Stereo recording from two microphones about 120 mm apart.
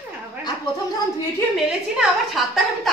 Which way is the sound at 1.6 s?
Centre (ahead or behind).